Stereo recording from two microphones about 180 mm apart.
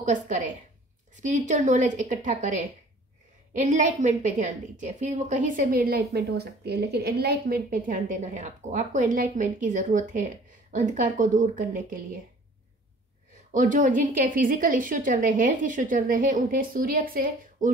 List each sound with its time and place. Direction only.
0.0 s a woman's voice: 45° right (ahead or behind)
13.5 s a woman's voice: 45° right (ahead or behind)